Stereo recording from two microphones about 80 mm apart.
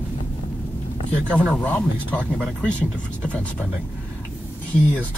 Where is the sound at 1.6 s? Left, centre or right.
Centre.